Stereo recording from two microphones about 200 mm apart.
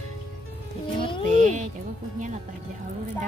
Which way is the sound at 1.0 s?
25° left (ahead or behind).